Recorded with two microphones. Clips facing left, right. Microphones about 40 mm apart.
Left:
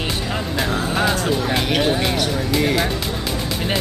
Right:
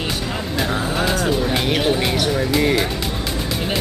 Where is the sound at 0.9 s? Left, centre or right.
Centre.